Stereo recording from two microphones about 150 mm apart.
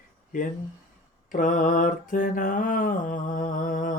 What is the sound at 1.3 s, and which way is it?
Mantra, 60° left (ahead or behind).